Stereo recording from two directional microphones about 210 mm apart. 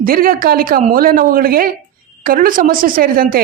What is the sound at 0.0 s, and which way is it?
A woman's voice, 45° right (ahead or behind).